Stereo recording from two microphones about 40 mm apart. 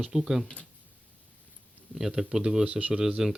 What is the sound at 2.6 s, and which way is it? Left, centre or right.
Speech, right.